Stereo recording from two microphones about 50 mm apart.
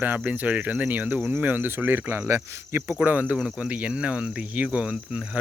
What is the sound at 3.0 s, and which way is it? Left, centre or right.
Speech, right.